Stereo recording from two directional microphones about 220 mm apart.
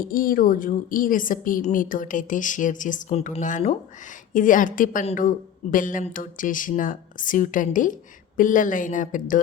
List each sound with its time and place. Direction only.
0.0 s a woman's voice: 40° left (ahead or behind)